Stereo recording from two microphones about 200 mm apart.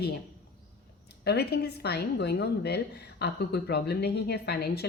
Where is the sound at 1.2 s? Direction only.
55° left (ahead or behind).